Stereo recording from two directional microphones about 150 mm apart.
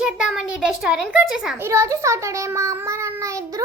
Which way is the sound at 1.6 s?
20° right (ahead or behind).